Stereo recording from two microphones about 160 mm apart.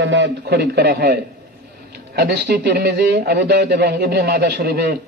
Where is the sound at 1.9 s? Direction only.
85° right.